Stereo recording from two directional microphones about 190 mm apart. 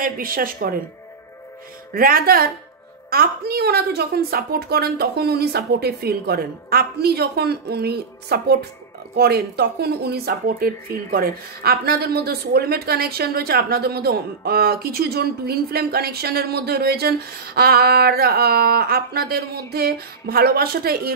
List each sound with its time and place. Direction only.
0.0 s speech: 50° right (ahead or behind)
2.0 s speech: 50° right (ahead or behind)